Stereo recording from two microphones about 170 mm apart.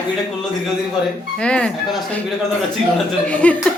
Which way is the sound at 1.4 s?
5° left (ahead or behind).